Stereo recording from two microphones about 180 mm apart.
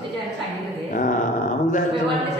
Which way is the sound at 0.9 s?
45° left (ahead or behind).